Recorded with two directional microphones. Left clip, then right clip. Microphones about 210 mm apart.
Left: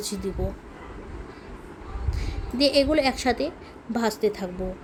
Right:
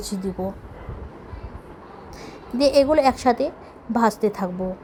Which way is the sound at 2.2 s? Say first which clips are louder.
Right 3 dB; 10° right (ahead or behind).